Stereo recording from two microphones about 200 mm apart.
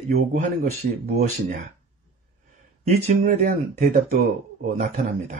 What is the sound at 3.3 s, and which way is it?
Speech, 35° right (ahead or behind).